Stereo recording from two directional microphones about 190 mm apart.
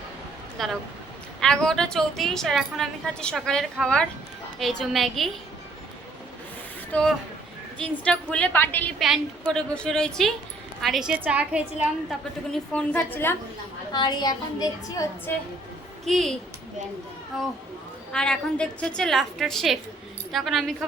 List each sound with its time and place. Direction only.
0.6 s a woman's voice: centre (ahead or behind)
6.9 s a woman's voice: 10° left (ahead or behind)
9.0 s a woman's voice: centre (ahead or behind)
12.5 s a woman's voice: 5° left (ahead or behind)
13.9 s a woman's voice: 20° left (ahead or behind)
16.0 s a woman's voice: centre (ahead or behind)
18.1 s a woman's voice: 5° left (ahead or behind)